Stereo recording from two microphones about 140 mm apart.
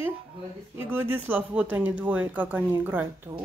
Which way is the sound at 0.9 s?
15° right (ahead or behind).